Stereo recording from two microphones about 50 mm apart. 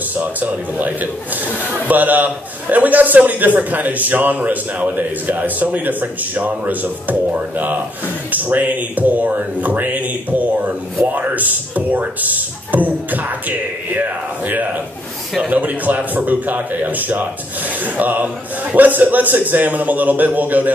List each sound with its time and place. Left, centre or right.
0.2 s a man's voice: right